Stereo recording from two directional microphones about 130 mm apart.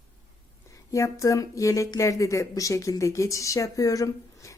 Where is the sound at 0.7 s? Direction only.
25° left (ahead or behind).